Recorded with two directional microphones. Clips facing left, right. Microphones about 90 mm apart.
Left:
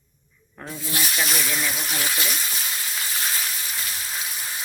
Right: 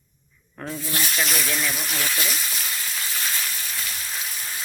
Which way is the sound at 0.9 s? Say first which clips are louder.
Left 1 dB; 15° left (ahead or behind).